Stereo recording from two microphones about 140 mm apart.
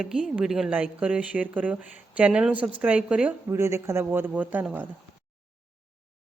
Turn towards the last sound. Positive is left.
turn(degrees=-10)  # may be behind; listen again after turning